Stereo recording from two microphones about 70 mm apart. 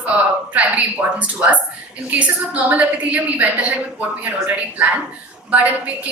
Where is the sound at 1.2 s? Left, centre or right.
Right.